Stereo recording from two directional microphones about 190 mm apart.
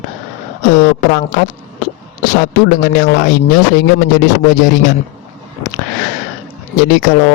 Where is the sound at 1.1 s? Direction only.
45° left (ahead or behind).